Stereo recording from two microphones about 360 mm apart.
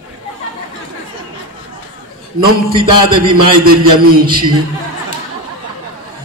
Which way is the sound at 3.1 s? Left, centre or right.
Right.